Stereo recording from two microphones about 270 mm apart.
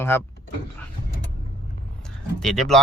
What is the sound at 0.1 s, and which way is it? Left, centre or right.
Speech, centre.